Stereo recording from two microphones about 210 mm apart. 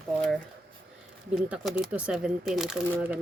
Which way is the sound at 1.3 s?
5° right (ahead or behind).